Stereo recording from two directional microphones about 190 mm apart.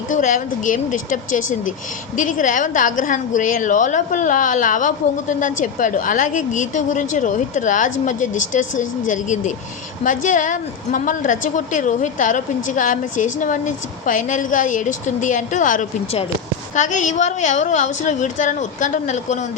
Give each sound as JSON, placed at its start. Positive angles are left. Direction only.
{"t": 0.1, "sound": "a woman's voice", "side_deg": 40}